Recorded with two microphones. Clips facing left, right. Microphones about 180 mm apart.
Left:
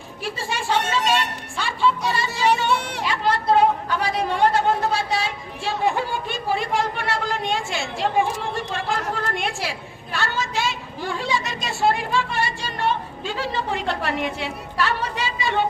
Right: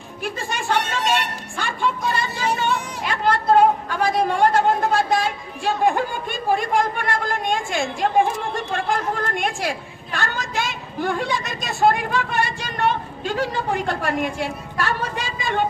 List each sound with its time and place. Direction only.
0.2 s a woman's voice: 55° right (ahead or behind)
2.3 s speech: 70° left (ahead or behind)
3.1 s a woman's voice: 50° right (ahead or behind)